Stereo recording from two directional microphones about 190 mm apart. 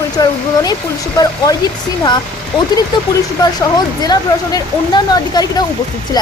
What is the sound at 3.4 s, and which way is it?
A woman's voice, 20° left (ahead or behind).